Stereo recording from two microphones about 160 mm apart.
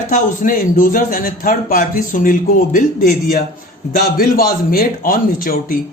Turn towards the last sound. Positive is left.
turn(degrees=60)  # may be behind; listen again after turning